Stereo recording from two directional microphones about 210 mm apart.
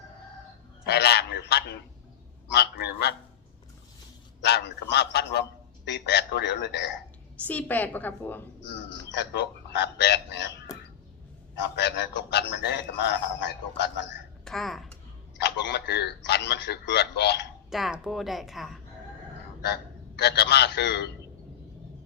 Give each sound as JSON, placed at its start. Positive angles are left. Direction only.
{"t": 0.9, "sound": "a man's voice", "side_deg": 50}
{"t": 4.4, "sound": "a man's voice", "side_deg": 55}
{"t": 7.4, "sound": "a woman's voice", "side_deg": 10}
{"t": 9.1, "sound": "a man's voice", "side_deg": 55}
{"t": 11.8, "sound": "a man's voice", "side_deg": 55}
{"t": 14.4, "sound": "a woman's voice", "side_deg": 0}
{"t": 15.4, "sound": "a man's voice", "side_deg": 55}
{"t": 17.7, "sound": "a woman's voice", "side_deg": 0}
{"t": 19.6, "sound": "a man's voice", "side_deg": 55}